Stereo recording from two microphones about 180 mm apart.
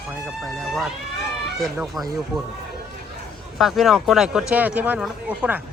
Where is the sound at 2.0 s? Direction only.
Centre (ahead or behind).